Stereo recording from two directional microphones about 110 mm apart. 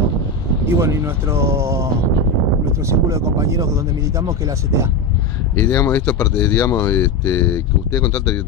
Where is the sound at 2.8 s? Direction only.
30° right (ahead or behind).